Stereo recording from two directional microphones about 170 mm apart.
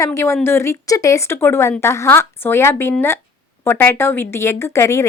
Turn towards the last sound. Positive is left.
turn(degrees=15)  # may be behind; listen again after turning